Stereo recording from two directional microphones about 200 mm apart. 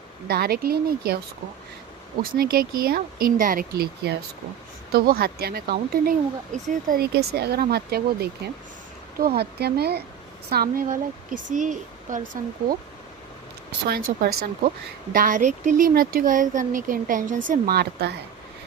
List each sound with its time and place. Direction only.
0.3 s speech: 50° right (ahead or behind)
2.4 s speech: 50° right (ahead or behind)
13.7 s speech: 50° right (ahead or behind)
15.1 s speech: 40° right (ahead or behind)
17.5 s speech: 50° right (ahead or behind)